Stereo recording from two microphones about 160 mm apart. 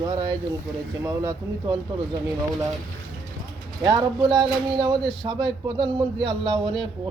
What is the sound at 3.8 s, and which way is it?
A man's voice, 25° right (ahead or behind).